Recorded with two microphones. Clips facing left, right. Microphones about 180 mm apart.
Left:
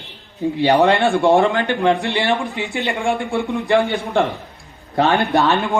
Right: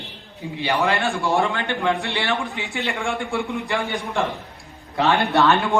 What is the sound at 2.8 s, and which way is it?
Speech, 15° left (ahead or behind).